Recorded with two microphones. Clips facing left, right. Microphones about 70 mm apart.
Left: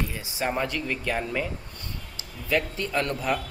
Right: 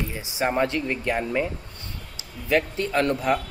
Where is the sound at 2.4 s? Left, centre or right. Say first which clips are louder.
Right 4 dB; right.